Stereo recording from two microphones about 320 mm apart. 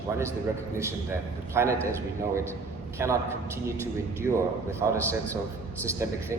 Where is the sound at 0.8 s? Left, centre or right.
Centre.